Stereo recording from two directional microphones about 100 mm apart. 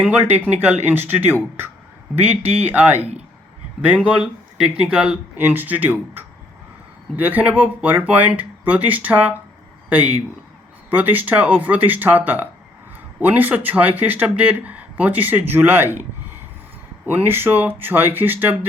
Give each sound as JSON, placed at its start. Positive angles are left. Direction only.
{"t": 0.0, "sound": "speech", "side_deg": -20}
{"t": 3.0, "sound": "a man's voice", "side_deg": -90}
{"t": 3.8, "sound": "speech", "side_deg": -15}
{"t": 10.8, "sound": "speech", "side_deg": -20}
{"t": 17.1, "sound": "speech", "side_deg": -20}